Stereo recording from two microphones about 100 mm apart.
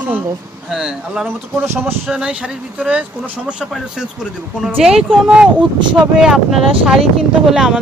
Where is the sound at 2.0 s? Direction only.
10° right (ahead or behind).